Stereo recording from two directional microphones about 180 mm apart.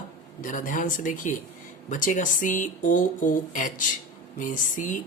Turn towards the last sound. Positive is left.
turn(degrees=45)  # may be behind; listen again after turning